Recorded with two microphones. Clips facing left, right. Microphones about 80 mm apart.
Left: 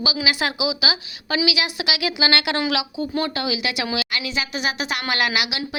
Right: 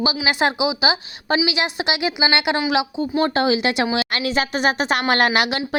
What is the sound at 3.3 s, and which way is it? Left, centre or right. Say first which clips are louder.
Speech: right 7 dB; right.